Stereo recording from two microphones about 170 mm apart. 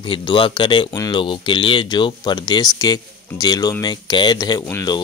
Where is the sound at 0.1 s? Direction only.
30° left (ahead or behind).